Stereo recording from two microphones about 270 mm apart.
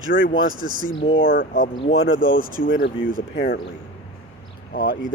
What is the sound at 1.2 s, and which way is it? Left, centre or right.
Speech, left.